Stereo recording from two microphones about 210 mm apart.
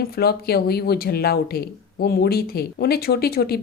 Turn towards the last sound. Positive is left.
turn(degrees=50)  # may be behind; listen again after turning